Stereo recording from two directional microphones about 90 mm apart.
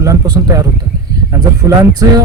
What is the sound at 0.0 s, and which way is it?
Speech, 40° right (ahead or behind).